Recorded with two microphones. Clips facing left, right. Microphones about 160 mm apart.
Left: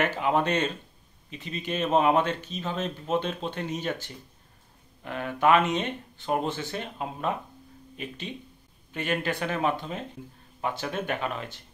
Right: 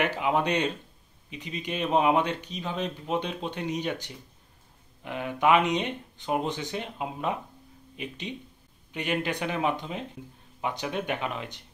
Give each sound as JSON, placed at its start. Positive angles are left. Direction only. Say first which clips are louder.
{"t": 0.0, "sound": "speech", "louder": "left 1 dB", "side_deg": -10}